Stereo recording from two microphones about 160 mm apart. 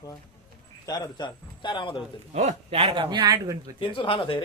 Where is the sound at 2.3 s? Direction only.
40° right (ahead or behind); by 3.5 s 25° right (ahead or behind).